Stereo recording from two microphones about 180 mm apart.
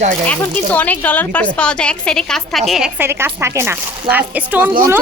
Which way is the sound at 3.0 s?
15° right (ahead or behind).